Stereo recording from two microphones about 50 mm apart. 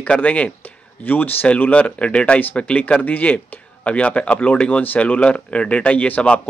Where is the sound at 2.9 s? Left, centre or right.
Left.